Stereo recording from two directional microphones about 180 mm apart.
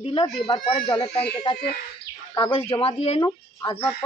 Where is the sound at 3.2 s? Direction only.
25° left (ahead or behind).